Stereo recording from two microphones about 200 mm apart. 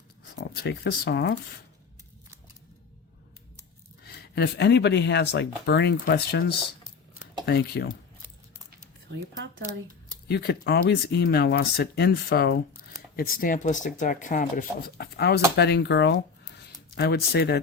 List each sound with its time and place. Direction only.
0.3 s speech: 55° left (ahead or behind)
4.0 s speech: 50° left (ahead or behind)
7.4 s speech: 50° left (ahead or behind)
9.1 s speech: 65° right (ahead or behind)
10.2 s speech: 55° left (ahead or behind)